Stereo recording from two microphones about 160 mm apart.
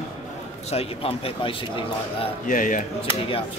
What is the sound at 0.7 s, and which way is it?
A man's voice, 40° left (ahead or behind).